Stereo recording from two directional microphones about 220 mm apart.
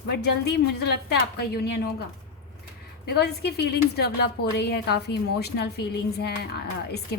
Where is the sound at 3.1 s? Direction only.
45° left (ahead or behind).